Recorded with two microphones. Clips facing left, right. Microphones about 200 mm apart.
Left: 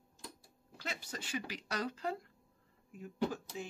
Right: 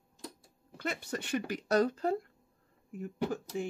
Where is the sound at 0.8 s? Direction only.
60° right (ahead or behind).